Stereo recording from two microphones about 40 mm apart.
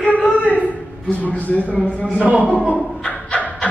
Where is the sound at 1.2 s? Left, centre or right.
Left.